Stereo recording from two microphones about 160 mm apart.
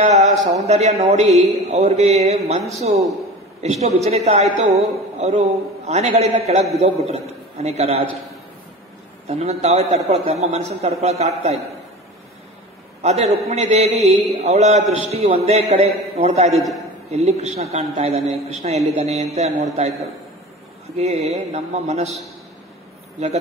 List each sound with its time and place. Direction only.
0.0 s a sound: 45° right (ahead or behind)
0.6 s a man's voice: 45° right (ahead or behind)
9.3 s a man's voice: 40° right (ahead or behind)
13.0 s a man's voice: 45° right (ahead or behind)